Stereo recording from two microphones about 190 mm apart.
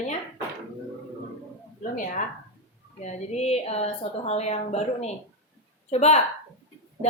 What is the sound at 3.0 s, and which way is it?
A woman's voice, 35° left (ahead or behind).